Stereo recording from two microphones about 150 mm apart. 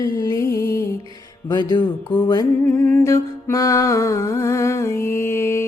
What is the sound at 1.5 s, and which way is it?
Music, 25° left (ahead or behind).